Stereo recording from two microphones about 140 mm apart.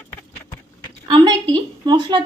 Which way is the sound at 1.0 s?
30° right (ahead or behind).